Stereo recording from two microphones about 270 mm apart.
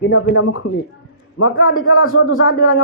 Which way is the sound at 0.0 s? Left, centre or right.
Left.